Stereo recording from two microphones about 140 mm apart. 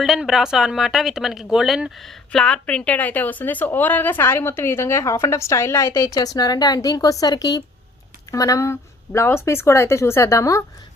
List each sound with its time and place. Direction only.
0.0 s speech: centre (ahead or behind); by 10.6 s 20° left (ahead or behind)